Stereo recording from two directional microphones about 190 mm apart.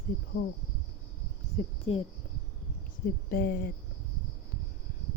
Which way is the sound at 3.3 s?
50° left (ahead or behind).